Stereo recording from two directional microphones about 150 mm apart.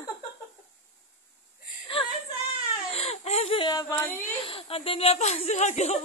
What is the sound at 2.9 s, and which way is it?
Baby cry, 45° left (ahead or behind).